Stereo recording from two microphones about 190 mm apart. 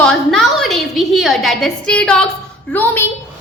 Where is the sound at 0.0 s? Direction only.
5° left (ahead or behind).